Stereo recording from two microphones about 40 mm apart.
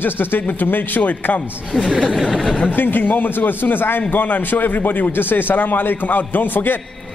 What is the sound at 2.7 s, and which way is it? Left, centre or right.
A man's voice, left.